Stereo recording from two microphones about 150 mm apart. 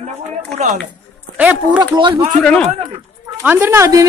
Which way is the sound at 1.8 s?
30° right (ahead or behind).